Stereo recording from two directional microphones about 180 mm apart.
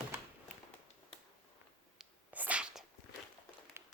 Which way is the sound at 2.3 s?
5° right (ahead or behind).